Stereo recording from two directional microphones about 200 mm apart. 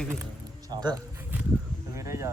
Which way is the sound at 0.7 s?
20° right (ahead or behind).